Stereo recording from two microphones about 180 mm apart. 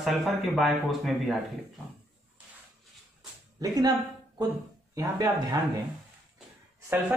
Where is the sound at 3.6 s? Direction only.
20° right (ahead or behind).